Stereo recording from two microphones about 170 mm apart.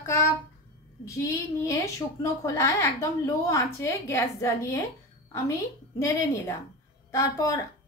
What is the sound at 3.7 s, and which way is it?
A woman's voice, 15° left (ahead or behind).